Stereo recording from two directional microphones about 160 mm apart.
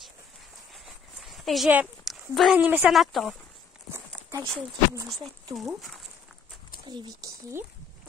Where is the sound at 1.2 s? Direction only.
Centre (ahead or behind).